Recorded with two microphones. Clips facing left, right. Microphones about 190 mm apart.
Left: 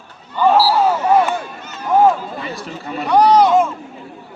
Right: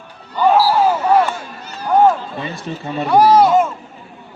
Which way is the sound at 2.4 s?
25° right (ahead or behind).